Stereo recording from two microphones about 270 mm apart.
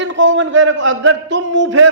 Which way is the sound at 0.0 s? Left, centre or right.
Right.